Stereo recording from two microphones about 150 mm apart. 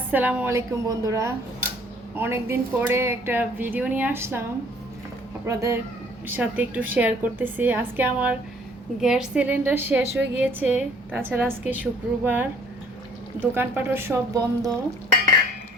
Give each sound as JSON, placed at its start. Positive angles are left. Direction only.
{"t": 0.1, "sound": "a woman's voice", "side_deg": -10}
{"t": 5.5, "sound": "a woman's voice", "side_deg": -20}